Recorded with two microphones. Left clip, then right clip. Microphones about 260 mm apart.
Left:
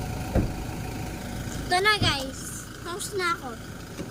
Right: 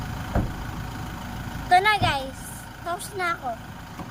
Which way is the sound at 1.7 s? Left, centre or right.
Centre.